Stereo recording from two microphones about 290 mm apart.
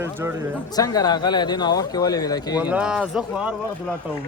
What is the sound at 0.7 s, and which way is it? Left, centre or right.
Speech, centre.